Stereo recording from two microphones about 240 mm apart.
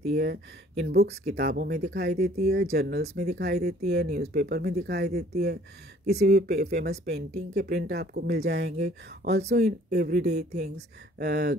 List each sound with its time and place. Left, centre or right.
0.1 s speech: right